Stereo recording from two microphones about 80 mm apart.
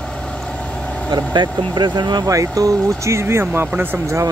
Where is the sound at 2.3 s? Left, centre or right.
Right.